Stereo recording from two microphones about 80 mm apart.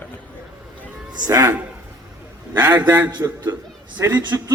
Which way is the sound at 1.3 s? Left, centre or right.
Right.